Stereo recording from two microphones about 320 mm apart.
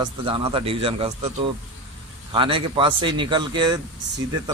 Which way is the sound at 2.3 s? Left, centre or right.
Centre.